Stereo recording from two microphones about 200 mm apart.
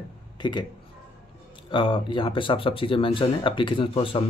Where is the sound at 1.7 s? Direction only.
25° left (ahead or behind).